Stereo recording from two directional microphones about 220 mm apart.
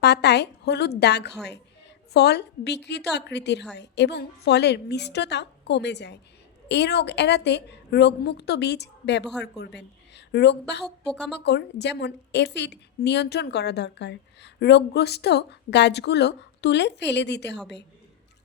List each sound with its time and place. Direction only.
0.0 s a woman's voice: 50° left (ahead or behind)
11.0 s speech: 5° left (ahead or behind)
11.3 s a woman's voice: 50° left (ahead or behind)